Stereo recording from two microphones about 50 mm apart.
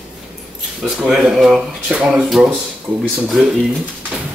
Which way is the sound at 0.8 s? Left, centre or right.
Centre.